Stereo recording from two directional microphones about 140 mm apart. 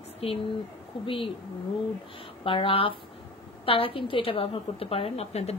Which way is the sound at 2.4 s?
40° left (ahead or behind).